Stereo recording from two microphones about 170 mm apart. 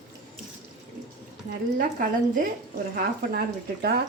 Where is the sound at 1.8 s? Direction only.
55° right (ahead or behind).